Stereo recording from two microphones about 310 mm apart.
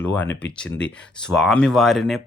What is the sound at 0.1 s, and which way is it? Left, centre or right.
Speech, centre.